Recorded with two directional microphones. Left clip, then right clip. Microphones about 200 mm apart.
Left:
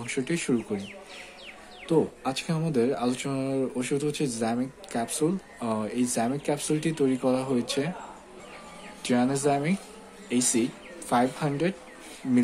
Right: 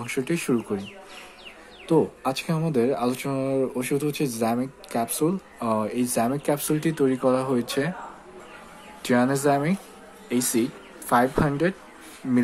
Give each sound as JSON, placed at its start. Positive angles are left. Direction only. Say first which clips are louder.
{"t": 0.0, "sound": "speech", "louder": "right 3 dB", "side_deg": -10}
{"t": 1.9, "sound": "speech", "louder": "right 3 dB", "side_deg": -10}
{"t": 9.0, "sound": "speech", "louder": "right 4 dB", "side_deg": -10}